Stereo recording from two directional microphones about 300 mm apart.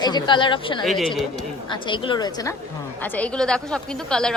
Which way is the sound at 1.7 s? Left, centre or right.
Centre.